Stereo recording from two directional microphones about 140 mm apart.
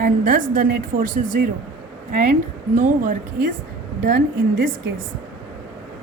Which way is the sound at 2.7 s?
65° right (ahead or behind).